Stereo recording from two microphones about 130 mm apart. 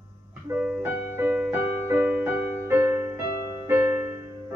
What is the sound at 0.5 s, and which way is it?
Music, 10° right (ahead or behind).